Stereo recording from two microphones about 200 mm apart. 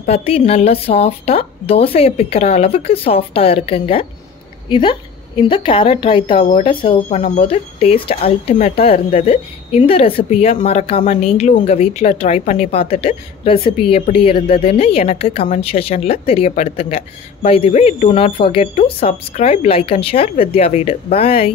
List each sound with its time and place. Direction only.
0.0 s speech: 30° left (ahead or behind)
7.1 s a woman's voice: 35° left (ahead or behind)